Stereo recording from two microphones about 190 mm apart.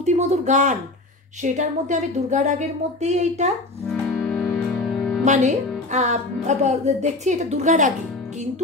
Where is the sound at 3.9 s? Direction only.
5° left (ahead or behind).